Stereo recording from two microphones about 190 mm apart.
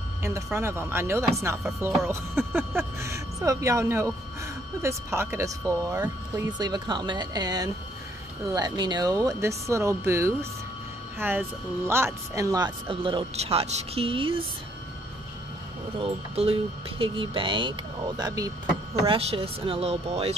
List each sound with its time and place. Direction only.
0.6 s speech: 15° right (ahead or behind); by 14.3 s 30° right (ahead or behind)
16.0 s speech: 30° right (ahead or behind)
19.0 s speech: 30° right (ahead or behind)